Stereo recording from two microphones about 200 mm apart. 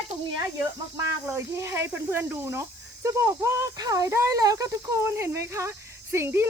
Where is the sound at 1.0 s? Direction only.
15° right (ahead or behind).